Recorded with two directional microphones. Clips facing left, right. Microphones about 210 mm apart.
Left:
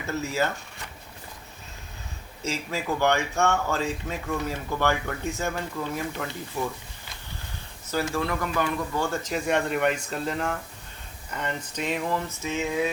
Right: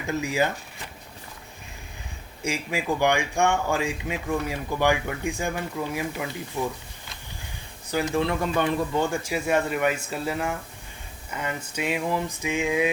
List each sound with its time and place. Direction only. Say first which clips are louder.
0.1 s speech: right 2 dB; 15° right (ahead or behind)
2.4 s speech: right 2 dB; 15° right (ahead or behind)
7.9 s speech: right 3 dB; 15° right (ahead or behind)
9.0 s speech: right 1 dB; 10° right (ahead or behind)